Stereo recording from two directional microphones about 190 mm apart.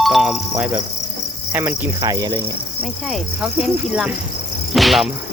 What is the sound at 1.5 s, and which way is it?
Speech, 10° right (ahead or behind).